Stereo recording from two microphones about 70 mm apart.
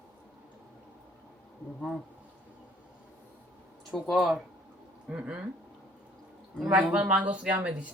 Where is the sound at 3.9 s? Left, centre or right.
Centre.